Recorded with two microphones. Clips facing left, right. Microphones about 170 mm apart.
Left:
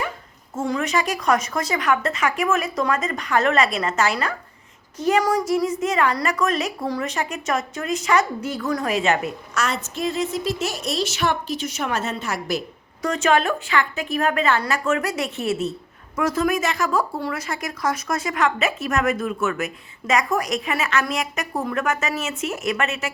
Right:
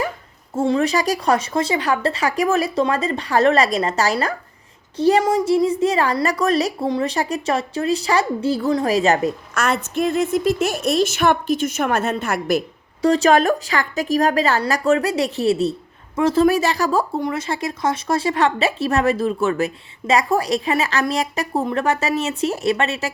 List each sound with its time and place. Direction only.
0.5 s a woman's voice: 30° right (ahead or behind)
6.8 s speech: 25° right (ahead or behind)
7.1 s a woman's voice: 35° right (ahead or behind)
9.6 s a woman's voice: 55° right (ahead or behind)
13.0 s a woman's voice: 35° right (ahead or behind)
17.2 s a woman's voice: 20° right (ahead or behind)